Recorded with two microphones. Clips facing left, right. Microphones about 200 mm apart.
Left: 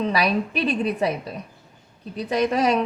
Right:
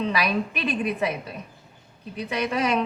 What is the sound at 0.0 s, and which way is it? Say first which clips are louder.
A woman's voice: left 3 dB; 35° left (ahead or behind).